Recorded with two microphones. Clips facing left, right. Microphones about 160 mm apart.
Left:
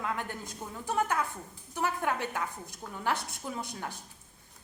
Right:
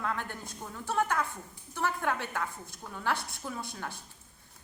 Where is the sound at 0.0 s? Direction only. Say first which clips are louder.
Even; 15° left (ahead or behind).